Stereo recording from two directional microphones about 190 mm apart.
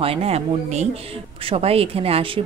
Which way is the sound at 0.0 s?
30° right (ahead or behind).